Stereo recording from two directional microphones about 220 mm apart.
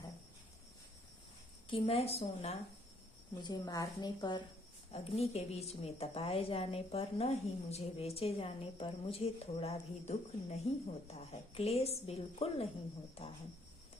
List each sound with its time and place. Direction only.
1.7 s a woman's voice: 25° left (ahead or behind)